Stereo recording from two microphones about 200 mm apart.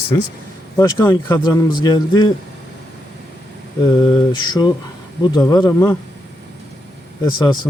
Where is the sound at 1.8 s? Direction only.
20° left (ahead or behind).